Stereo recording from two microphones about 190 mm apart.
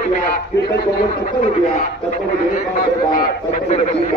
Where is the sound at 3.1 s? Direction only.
35° left (ahead or behind).